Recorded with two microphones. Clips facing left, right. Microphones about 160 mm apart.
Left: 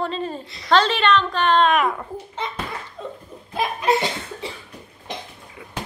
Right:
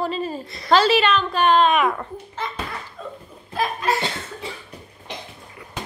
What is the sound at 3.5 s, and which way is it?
Laughter, 15° left (ahead or behind).